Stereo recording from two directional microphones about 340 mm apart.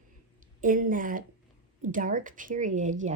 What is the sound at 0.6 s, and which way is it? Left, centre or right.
Speech, right.